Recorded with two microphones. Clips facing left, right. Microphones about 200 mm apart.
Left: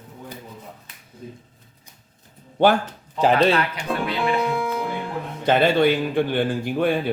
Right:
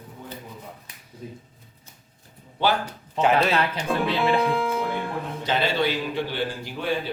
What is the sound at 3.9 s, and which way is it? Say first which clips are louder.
Speech: right 1 dB; centre (ahead or behind).